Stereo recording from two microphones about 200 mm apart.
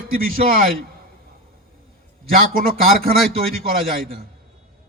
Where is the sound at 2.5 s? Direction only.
45° right (ahead or behind).